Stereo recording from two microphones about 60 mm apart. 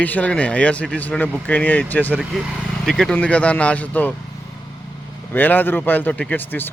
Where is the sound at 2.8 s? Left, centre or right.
Centre.